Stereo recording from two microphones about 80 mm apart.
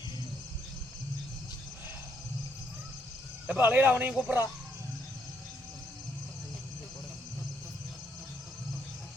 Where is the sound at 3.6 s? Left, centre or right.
Right.